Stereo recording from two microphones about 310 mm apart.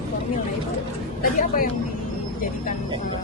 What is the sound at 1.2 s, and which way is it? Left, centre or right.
Speech, left.